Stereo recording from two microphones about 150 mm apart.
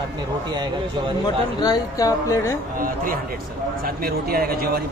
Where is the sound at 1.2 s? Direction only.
25° left (ahead or behind).